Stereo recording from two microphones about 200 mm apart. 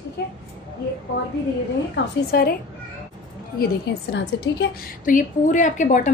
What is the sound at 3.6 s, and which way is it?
A woman's voice, 55° left (ahead or behind).